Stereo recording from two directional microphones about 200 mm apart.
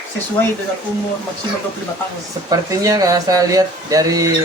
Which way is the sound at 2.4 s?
20° right (ahead or behind).